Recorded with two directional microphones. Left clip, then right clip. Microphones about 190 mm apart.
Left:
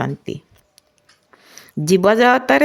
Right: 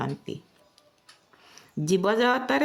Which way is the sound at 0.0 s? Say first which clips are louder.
Left 8 dB; 35° left (ahead or behind).